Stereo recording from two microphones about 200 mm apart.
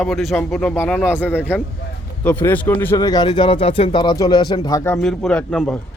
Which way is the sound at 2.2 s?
10° left (ahead or behind).